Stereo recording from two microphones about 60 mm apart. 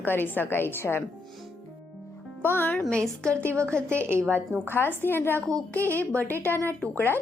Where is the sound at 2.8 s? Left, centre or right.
Centre.